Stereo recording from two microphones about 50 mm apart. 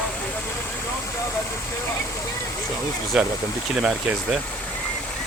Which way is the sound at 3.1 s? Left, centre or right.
Centre.